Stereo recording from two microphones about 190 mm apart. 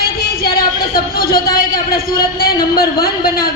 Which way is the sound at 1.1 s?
50° left (ahead or behind).